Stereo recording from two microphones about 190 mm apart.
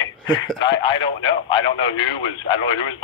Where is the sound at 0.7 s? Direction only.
25° left (ahead or behind).